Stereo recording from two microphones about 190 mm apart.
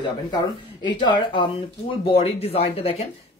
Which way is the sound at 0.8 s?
25° left (ahead or behind).